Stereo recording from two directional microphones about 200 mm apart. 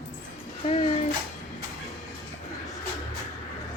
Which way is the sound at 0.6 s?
30° left (ahead or behind).